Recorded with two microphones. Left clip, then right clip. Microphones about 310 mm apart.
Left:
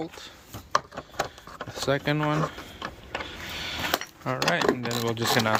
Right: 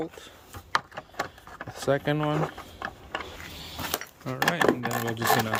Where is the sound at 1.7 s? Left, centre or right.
Centre.